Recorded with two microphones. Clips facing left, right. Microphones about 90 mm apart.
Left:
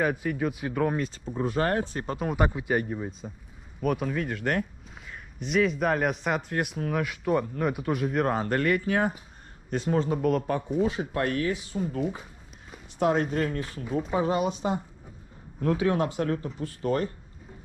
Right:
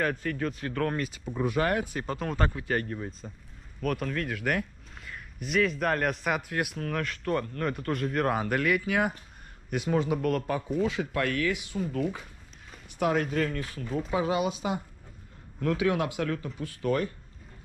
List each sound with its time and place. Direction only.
0.0 s speech: 10° left (ahead or behind)
1.3 s speech: 25° left (ahead or behind)
2.0 s speech: 5° left (ahead or behind)
10.1 s speech: 5° left (ahead or behind)
10.8 s speech: 25° left (ahead or behind)
13.0 s speech: 30° left (ahead or behind)
13.6 s speech: 5° left (ahead or behind)
15.6 s speech: 30° left (ahead or behind)